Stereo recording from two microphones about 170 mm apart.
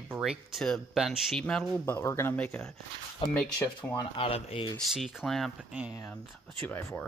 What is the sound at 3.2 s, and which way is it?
Speech, 30° left (ahead or behind).